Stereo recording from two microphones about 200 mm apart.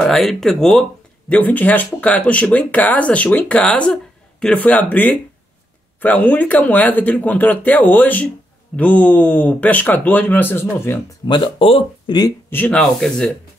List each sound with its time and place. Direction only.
0.0 s speech: centre (ahead or behind)
11.2 s speech: 25° left (ahead or behind)
12.5 s speech: 5° left (ahead or behind)